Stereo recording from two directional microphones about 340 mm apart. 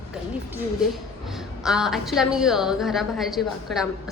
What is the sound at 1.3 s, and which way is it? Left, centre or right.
A woman's voice, centre.